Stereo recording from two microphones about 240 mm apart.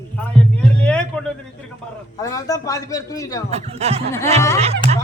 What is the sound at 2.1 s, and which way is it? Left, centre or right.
A man's voice, centre.